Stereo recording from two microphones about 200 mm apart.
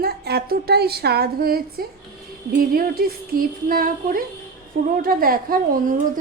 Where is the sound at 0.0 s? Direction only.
50° right (ahead or behind).